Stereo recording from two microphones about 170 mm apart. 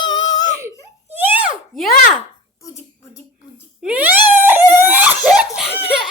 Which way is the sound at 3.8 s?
10° right (ahead or behind).